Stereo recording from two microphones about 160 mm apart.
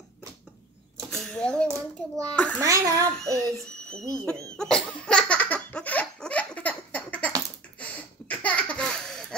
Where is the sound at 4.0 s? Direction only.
20° right (ahead or behind).